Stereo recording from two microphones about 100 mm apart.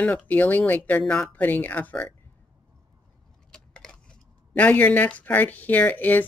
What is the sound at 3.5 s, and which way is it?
Speech, 5° left (ahead or behind).